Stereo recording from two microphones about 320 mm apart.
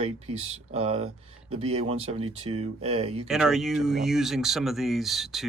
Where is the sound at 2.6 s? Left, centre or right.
Centre.